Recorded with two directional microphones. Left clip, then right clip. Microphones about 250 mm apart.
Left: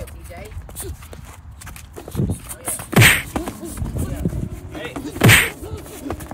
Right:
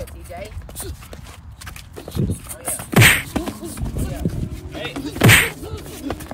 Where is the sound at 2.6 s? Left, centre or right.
Centre.